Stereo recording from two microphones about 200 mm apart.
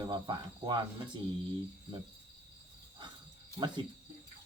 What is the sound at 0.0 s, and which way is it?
Speech, 20° right (ahead or behind).